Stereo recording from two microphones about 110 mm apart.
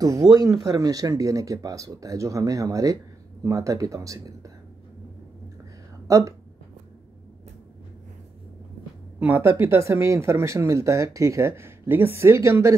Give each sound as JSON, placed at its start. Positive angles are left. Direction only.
{"t": 0.3, "sound": "speech", "side_deg": -35}
{"t": 6.0, "sound": "a woman's voice", "side_deg": -30}
{"t": 9.2, "sound": "speech", "side_deg": -20}